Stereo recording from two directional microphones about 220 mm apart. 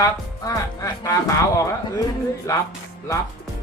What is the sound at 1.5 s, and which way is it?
Speech, 15° left (ahead or behind).